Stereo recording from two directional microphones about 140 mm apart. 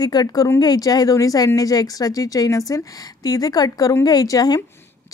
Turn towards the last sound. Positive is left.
turn(degrees=25)  # may be behind; listen again after turning